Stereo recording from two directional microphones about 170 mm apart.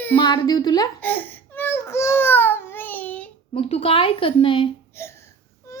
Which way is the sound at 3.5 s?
35° left (ahead or behind).